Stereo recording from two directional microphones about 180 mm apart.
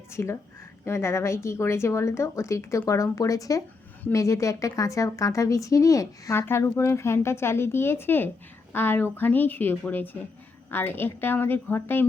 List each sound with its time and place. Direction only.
0.1 s a woman's voice: 15° left (ahead or behind)